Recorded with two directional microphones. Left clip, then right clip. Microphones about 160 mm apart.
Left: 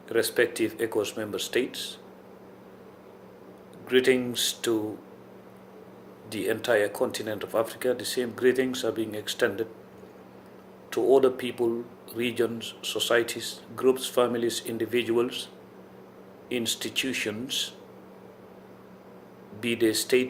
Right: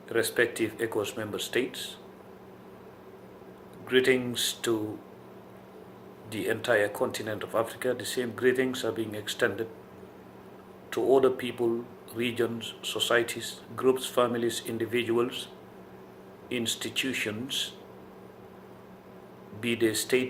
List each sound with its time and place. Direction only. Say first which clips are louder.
0.1 s speech: left 2 dB; 60° left (ahead or behind)
3.8 s speech: left 2 dB; 60° left (ahead or behind)
6.3 s speech: left 1 dB; 60° left (ahead or behind)
10.8 s speech: left 2 dB; 60° left (ahead or behind)
16.5 s speech: left 2 dB; 55° left (ahead or behind)
19.6 s speech: left 2 dB; 60° left (ahead or behind)